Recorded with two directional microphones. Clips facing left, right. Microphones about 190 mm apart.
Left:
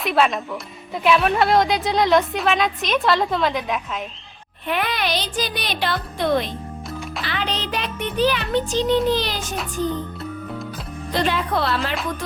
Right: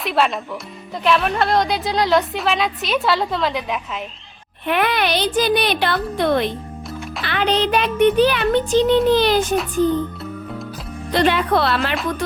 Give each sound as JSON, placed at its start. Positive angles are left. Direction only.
{"t": 0.0, "sound": "speech", "side_deg": 0}
{"t": 4.6, "sound": "a child's voice", "side_deg": -60}
{"t": 11.1, "sound": "speech", "side_deg": -70}